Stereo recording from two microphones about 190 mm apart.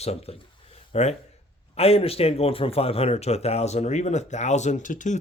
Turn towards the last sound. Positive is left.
turn(degrees=40)  # may be behind; listen again after turning